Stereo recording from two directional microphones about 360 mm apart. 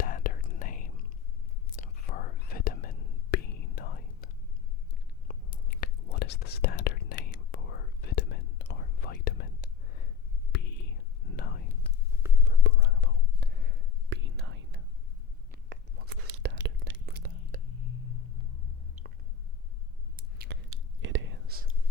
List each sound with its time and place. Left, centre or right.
0.0 s whispering: left
5.3 s whispering: left
12.5 s whispering: right
19.0 s a sound: centre
20.1 s whispering: right